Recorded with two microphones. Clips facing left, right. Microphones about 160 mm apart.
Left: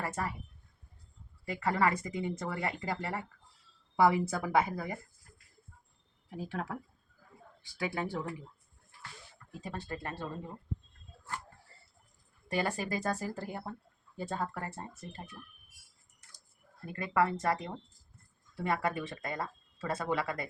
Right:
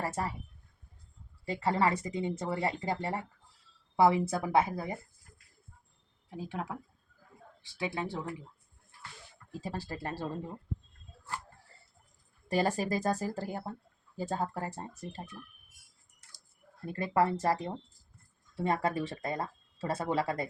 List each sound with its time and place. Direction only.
0.0 s speech: 30° right (ahead or behind)
1.5 s speech: 30° right (ahead or behind)
6.3 s speech: 20° right (ahead or behind)
9.5 s speech: 30° right (ahead or behind)
12.5 s speech: 35° right (ahead or behind)
16.8 s speech: 30° right (ahead or behind)